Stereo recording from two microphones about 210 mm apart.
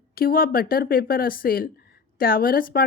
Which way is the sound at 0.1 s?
45° left (ahead or behind).